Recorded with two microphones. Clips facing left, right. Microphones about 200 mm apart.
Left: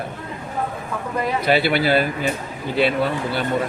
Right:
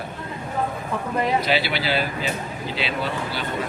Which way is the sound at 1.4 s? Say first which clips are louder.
Left 5 dB; 55° left (ahead or behind).